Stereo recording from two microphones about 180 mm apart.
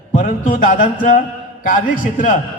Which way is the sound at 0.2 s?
45° left (ahead or behind).